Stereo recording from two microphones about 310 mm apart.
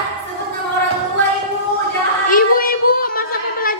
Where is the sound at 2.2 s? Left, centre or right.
Left.